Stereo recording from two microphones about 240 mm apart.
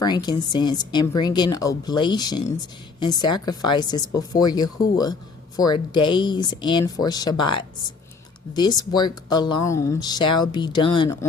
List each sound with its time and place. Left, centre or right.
0.0 s speech: centre